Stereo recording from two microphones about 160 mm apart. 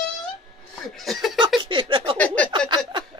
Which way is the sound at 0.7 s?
Centre (ahead or behind).